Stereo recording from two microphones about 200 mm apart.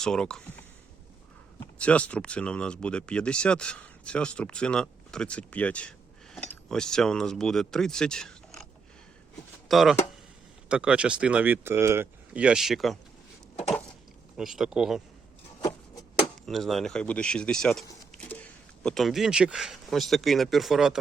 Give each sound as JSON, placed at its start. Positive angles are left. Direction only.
{"t": 0.0, "sound": "speech", "side_deg": 5}
{"t": 1.5, "sound": "speech", "side_deg": 5}
{"t": 9.6, "sound": "speech", "side_deg": 0}
{"t": 14.3, "sound": "speech", "side_deg": 0}
{"t": 15.6, "sound": "a sound", "side_deg": 15}
{"t": 16.5, "sound": "speech", "side_deg": 0}